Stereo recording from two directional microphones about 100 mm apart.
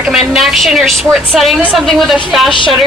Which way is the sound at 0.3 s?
Centre (ahead or behind).